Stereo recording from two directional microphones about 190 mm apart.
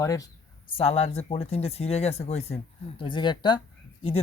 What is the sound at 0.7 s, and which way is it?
Speech, 35° left (ahead or behind).